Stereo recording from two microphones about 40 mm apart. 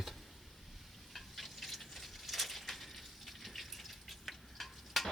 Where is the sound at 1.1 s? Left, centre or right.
Centre.